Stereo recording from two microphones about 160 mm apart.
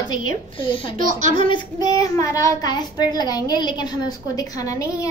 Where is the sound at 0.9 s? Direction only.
55° right (ahead or behind).